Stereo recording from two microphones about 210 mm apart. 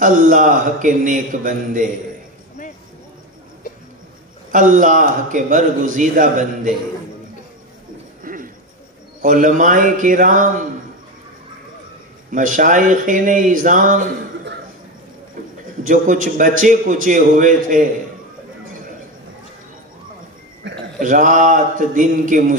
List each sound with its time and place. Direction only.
0.0 s a man's voice: 40° right (ahead or behind)
4.5 s a man's voice: 40° right (ahead or behind)
8.2 s a sound: 40° right (ahead or behind)
9.2 s a man's voice: 40° right (ahead or behind)
12.3 s a man's voice: 40° right (ahead or behind)
15.8 s a man's voice: 40° right (ahead or behind)
20.6 s a sound: 55° right (ahead or behind)
21.0 s a man's voice: 40° right (ahead or behind)